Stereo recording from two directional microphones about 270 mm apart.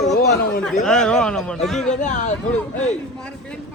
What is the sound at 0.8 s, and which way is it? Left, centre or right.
Speech, centre.